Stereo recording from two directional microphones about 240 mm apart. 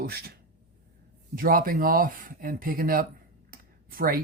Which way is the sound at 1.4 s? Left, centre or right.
Right.